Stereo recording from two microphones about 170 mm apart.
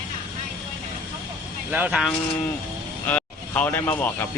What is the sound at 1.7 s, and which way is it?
Speech, 10° right (ahead or behind).